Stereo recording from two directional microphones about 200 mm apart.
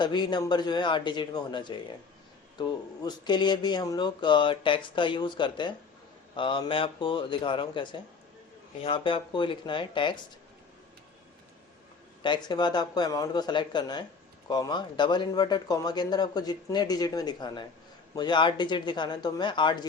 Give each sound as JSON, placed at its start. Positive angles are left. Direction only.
{"t": 0.0, "sound": "speech", "side_deg": 20}
{"t": 12.2, "sound": "speech", "side_deg": 20}